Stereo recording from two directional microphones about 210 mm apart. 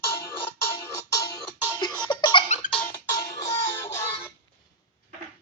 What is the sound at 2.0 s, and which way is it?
Baby laughter, 20° left (ahead or behind).